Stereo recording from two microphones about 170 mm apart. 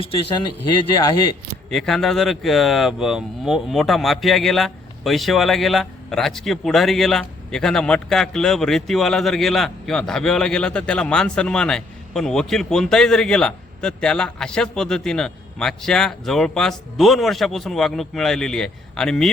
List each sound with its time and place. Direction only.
0.0 s speech: 30° left (ahead or behind)
1.7 s speech: 5° left (ahead or behind)